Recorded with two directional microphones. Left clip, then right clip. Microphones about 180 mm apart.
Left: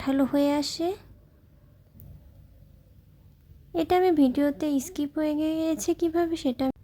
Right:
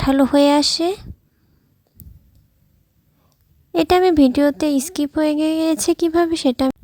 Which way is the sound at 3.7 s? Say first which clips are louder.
Right 8 dB; 40° right (ahead or behind).